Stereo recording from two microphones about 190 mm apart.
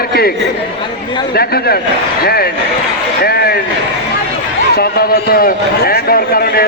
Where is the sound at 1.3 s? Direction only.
55° left (ahead or behind).